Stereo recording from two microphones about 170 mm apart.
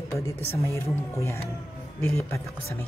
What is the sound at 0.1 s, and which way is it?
Speech, 20° left (ahead or behind).